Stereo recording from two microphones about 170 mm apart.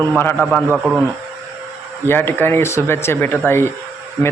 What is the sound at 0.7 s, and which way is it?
Speech, 10° right (ahead or behind).